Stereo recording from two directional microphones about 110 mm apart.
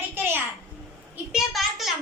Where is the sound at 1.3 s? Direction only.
Centre (ahead or behind).